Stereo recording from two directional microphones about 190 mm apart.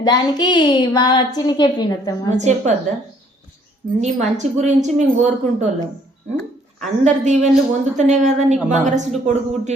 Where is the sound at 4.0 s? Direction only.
40° right (ahead or behind).